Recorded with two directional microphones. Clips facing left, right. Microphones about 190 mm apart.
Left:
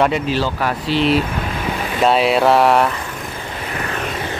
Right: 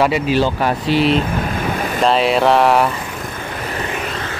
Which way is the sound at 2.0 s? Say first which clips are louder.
Left 1 dB; centre (ahead or behind).